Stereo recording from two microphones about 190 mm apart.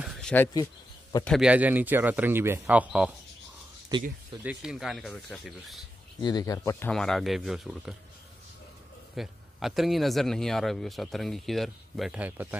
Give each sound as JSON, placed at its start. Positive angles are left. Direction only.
{"t": 0.0, "sound": "a sound", "side_deg": 0}
{"t": 1.2, "sound": "speech", "side_deg": 0}
{"t": 3.9, "sound": "speech", "side_deg": -25}
{"t": 4.4, "sound": "speech", "side_deg": -5}
{"t": 6.2, "sound": "speech", "side_deg": 20}
{"t": 6.9, "sound": "speech", "side_deg": 0}
{"t": 9.1, "sound": "speech", "side_deg": 0}